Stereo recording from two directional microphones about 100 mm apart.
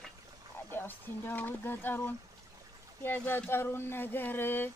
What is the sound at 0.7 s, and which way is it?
Speech, 20° left (ahead or behind).